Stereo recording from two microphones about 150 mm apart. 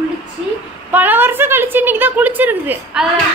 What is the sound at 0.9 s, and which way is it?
A woman's voice, 10° right (ahead or behind).